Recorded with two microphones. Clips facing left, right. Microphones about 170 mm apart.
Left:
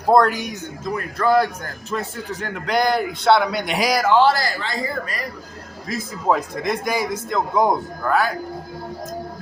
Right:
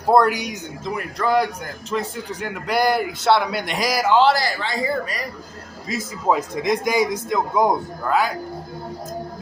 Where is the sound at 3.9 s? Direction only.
15° right (ahead or behind).